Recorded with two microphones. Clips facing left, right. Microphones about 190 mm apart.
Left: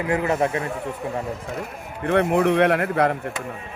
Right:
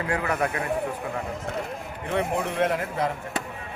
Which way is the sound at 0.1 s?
25° left (ahead or behind).